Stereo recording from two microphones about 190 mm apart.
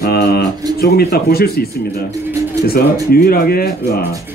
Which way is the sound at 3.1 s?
50° left (ahead or behind).